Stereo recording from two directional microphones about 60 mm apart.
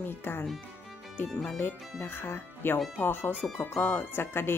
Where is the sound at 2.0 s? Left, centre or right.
Left.